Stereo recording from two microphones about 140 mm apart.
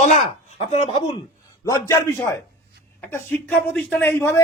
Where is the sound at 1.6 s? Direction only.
20° left (ahead or behind).